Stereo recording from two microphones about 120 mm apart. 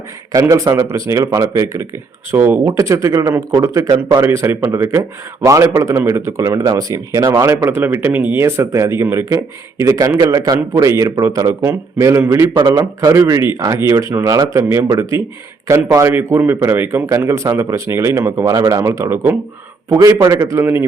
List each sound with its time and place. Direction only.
0.3 s speech: 30° right (ahead or behind)
2.6 s speech: 25° right (ahead or behind)